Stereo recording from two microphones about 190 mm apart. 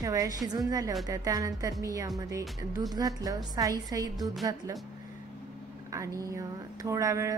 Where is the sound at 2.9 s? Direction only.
20° right (ahead or behind).